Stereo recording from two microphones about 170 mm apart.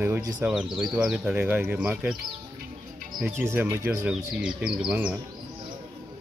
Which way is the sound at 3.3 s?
15° right (ahead or behind).